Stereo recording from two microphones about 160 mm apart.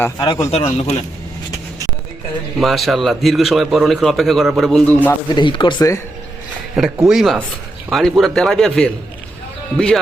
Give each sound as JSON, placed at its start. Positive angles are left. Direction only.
{"t": 0.2, "sound": "speech", "side_deg": 25}
{"t": 0.5, "sound": "a man's voice", "side_deg": 40}
{"t": 2.6, "sound": "a man's voice", "side_deg": 0}
{"t": 5.3, "sound": "speech", "side_deg": 30}
{"t": 6.8, "sound": "a man's voice", "side_deg": 0}